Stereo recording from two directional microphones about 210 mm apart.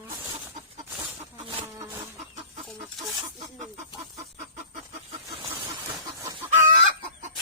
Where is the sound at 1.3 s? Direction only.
20° right (ahead or behind).